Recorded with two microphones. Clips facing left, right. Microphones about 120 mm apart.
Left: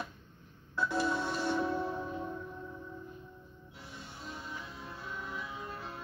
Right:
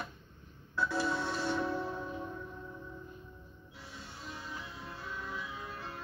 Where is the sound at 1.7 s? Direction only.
20° left (ahead or behind).